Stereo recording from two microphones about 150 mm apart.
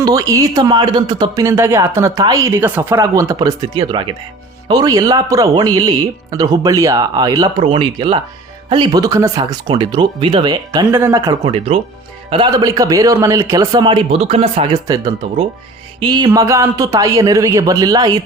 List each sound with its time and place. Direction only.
0.0 s a man's voice: 25° right (ahead or behind)
10.9 s speech: 15° right (ahead or behind)
11.3 s a man's voice: 40° right (ahead or behind)
14.7 s a man's voice: 25° right (ahead or behind)